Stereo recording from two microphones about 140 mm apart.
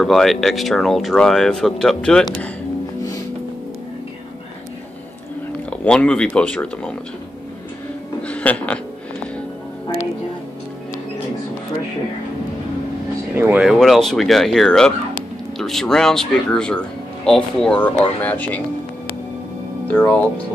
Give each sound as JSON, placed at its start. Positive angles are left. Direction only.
{"t": 0.0, "sound": "speech", "side_deg": 0}
{"t": 5.7, "sound": "speech", "side_deg": 10}
{"t": 8.2, "sound": "a sound", "side_deg": 10}
{"t": 13.3, "sound": "speech", "side_deg": -15}
{"t": 13.6, "sound": "speech", "side_deg": 0}
{"t": 19.9, "sound": "speech", "side_deg": 10}